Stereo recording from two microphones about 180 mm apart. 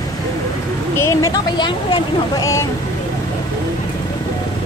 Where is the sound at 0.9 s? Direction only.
15° left (ahead or behind).